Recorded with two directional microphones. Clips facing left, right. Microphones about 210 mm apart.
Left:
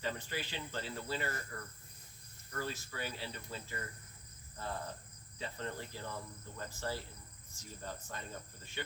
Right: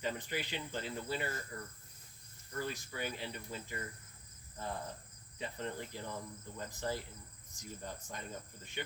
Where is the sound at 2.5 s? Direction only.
15° right (ahead or behind).